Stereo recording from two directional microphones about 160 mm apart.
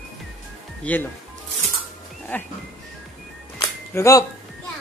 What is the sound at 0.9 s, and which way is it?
Speech, 10° left (ahead or behind).